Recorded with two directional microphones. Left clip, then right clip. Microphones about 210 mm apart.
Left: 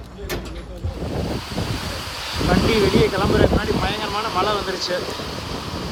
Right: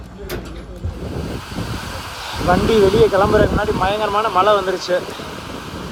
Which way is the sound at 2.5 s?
Centre (ahead or behind).